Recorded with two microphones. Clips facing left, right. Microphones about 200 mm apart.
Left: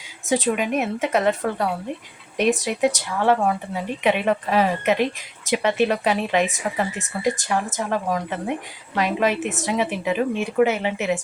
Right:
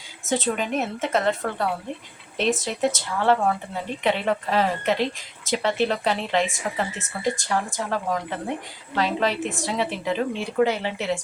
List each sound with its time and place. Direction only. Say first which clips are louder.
0.3 s speech: left 3 dB; 15° left (ahead or behind)